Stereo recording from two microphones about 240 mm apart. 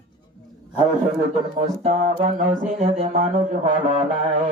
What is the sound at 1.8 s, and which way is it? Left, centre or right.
Music, right.